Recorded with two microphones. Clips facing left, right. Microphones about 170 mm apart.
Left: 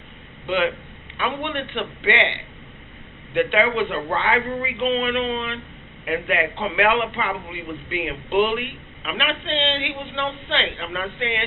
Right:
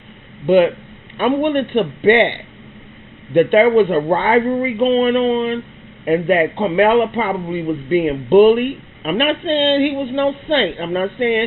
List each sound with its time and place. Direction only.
0.4 s a man's voice: 45° right (ahead or behind)